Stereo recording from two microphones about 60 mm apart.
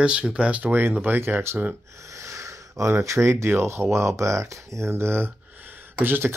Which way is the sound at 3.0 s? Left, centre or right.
Right.